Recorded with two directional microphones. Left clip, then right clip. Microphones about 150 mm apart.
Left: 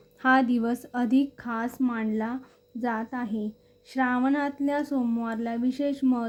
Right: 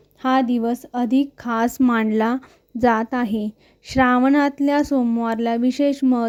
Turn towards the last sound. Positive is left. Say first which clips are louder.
# right 8 dB
turn(degrees=-50)  # may be behind; listen again after turning